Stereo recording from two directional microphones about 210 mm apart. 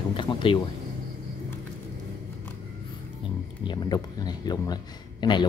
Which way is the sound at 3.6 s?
20° left (ahead or behind).